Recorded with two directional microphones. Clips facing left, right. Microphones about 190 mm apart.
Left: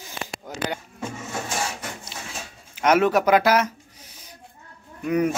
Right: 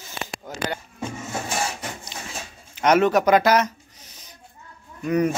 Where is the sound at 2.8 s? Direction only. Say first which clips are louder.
Right 1 dB; 5° left (ahead or behind).